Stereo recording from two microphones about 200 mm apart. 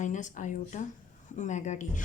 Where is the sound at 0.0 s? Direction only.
40° left (ahead or behind).